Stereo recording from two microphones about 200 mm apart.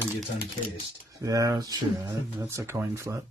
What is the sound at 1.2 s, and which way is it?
Speech, 15° right (ahead or behind).